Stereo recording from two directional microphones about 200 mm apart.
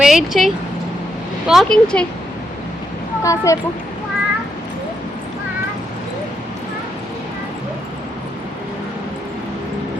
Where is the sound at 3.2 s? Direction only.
15° left (ahead or behind).